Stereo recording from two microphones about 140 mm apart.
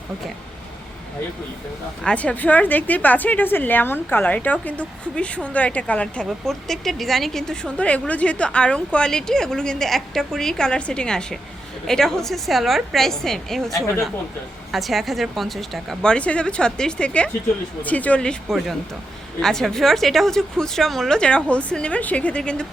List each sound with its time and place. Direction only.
2.0 s a woman's voice: 10° left (ahead or behind)
14.7 s a woman's voice: centre (ahead or behind)